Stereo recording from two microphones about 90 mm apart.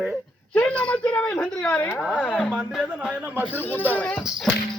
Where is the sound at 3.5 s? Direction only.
20° left (ahead or behind).